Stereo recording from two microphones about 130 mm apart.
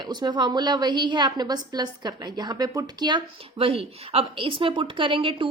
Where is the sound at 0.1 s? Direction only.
35° right (ahead or behind).